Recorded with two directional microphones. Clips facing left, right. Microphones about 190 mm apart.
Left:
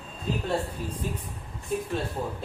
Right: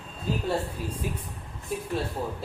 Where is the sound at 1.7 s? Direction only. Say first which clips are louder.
Left 3 dB; 5° right (ahead or behind).